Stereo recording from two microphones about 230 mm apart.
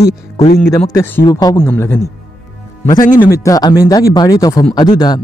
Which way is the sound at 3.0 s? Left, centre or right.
Left.